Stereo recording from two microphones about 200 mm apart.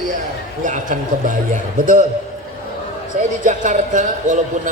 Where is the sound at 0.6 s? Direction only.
40° right (ahead or behind).